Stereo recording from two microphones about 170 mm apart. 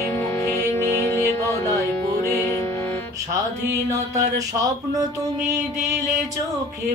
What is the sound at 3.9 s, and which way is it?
Mantra, 20° right (ahead or behind).